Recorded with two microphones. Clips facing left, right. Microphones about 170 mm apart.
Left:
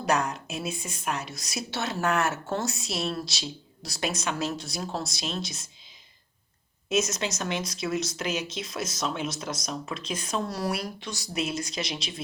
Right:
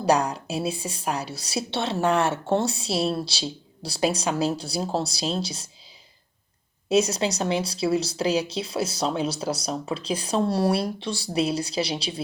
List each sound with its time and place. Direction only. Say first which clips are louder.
0.0 s a woman's voice: right 5 dB; 35° right (ahead or behind)
6.8 s a woman's voice: right 6 dB; 35° right (ahead or behind)